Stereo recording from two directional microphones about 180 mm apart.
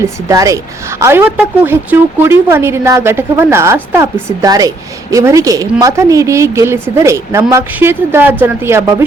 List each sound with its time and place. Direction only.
0.0 s a woman's voice: 20° right (ahead or behind)